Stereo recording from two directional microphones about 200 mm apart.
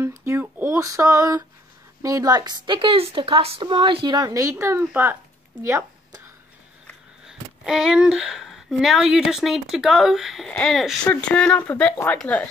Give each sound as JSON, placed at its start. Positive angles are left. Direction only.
{"t": 0.0, "sound": "a woman's voice", "side_deg": -15}
{"t": 5.6, "sound": "a sound", "side_deg": -15}
{"t": 7.2, "sound": "speech", "side_deg": -5}